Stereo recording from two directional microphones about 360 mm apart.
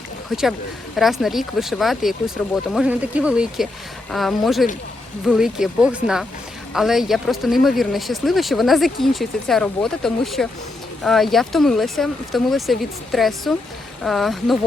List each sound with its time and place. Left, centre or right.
0.9 s speech: centre